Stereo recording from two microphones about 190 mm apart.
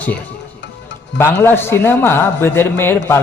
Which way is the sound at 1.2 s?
10° left (ahead or behind).